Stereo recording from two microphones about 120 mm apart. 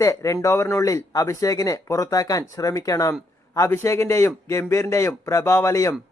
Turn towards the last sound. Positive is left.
turn(degrees=25)  # may be behind; listen again after turning